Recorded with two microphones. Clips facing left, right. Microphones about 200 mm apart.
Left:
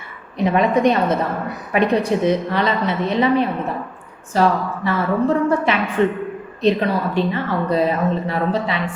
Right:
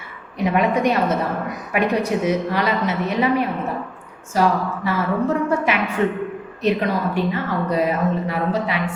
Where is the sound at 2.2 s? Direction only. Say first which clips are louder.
Left 2 dB; 10° right (ahead or behind).